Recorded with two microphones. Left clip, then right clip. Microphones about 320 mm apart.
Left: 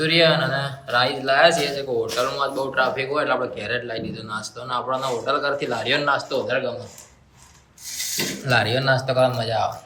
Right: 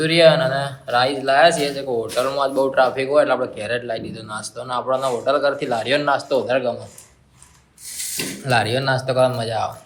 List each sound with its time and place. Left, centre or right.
0.0 s a man's voice: centre
8.4 s a man's voice: centre